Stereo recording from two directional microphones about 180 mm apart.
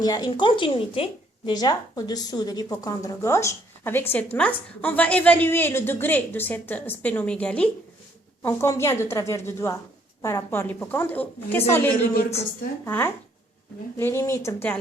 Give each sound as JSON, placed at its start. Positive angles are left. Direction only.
{"t": 0.0, "sound": "a woman's voice", "side_deg": 20}